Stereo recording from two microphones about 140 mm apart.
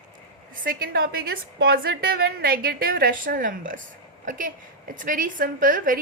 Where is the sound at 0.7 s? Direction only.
90° right.